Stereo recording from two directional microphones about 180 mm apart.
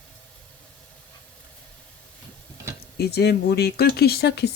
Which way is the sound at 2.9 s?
60° left (ahead or behind).